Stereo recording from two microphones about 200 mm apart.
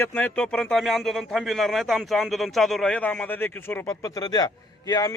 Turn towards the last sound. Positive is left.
turn(degrees=20)  # may be behind; listen again after turning